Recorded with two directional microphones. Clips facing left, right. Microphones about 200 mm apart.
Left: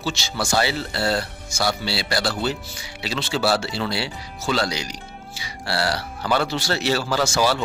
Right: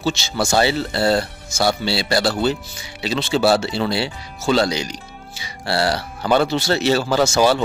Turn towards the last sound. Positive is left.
turn(degrees=-20)  # may be behind; listen again after turning